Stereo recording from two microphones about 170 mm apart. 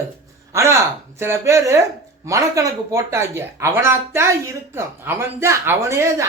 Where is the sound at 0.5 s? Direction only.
15° right (ahead or behind).